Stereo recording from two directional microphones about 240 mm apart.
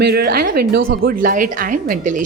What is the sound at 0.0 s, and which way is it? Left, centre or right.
Speech, right.